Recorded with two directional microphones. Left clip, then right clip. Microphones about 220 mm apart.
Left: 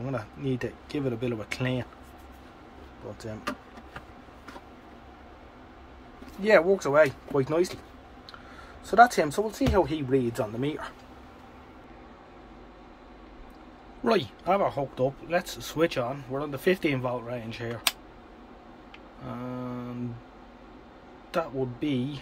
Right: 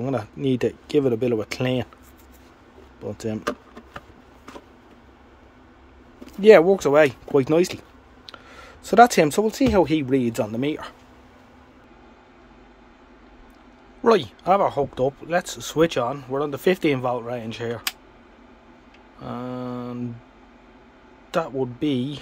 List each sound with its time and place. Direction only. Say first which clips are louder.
0.0 s speech: right 8 dB; 30° right (ahead or behind)
6.4 s speech: right 8 dB; 35° right (ahead or behind)
8.8 s speech: right 5 dB; 45° right (ahead or behind)
14.0 s speech: right 7 dB; 25° right (ahead or behind)
19.2 s mantra: right 6 dB; 30° right (ahead or behind)
21.3 s speech: right 5 dB; 30° right (ahead or behind)